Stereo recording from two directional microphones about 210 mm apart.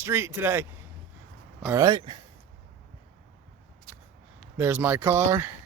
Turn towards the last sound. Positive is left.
turn(degrees=-10)  # may be behind; listen again after turning